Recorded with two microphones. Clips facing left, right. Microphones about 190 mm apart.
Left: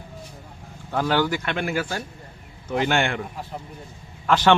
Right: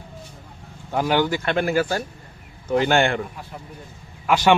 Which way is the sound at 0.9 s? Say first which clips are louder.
Right 2 dB; 15° right (ahead or behind).